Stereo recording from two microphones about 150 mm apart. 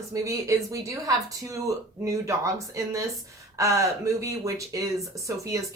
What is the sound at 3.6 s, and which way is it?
A woman's voice, 20° right (ahead or behind).